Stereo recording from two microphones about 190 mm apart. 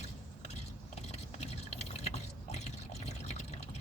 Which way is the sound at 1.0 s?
35° left (ahead or behind).